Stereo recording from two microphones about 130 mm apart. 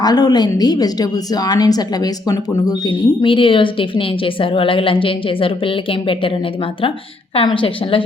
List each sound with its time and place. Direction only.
0.0 s a woman's voice: 30° left (ahead or behind)
2.9 s a woman's voice: 40° left (ahead or behind)